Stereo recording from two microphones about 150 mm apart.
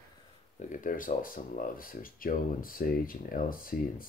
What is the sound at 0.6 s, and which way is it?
Speech, 60° left (ahead or behind).